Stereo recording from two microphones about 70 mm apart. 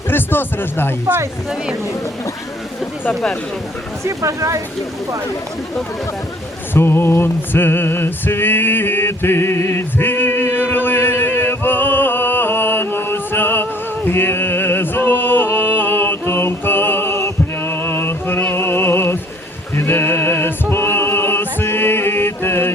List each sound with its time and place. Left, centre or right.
0.1 s speech: left
4.0 s speech: right
6.7 s a sound: left
19.7 s music: left